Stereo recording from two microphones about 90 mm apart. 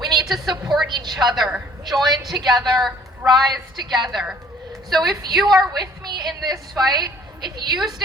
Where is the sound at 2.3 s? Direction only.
50° right (ahead or behind).